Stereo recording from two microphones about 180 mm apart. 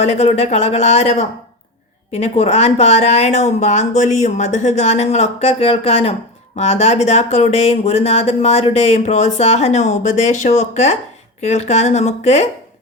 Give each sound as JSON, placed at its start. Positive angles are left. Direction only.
{"t": 0.0, "sound": "speech", "side_deg": 35}